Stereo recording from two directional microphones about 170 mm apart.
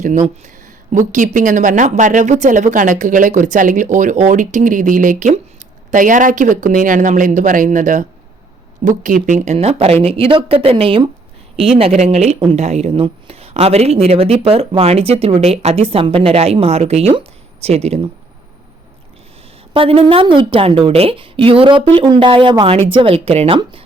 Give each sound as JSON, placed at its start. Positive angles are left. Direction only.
{"t": 0.0, "sound": "speech", "side_deg": -50}
{"t": 19.7, "sound": "speech", "side_deg": -35}